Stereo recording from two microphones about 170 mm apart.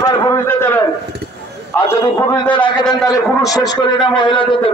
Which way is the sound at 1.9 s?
15° left (ahead or behind).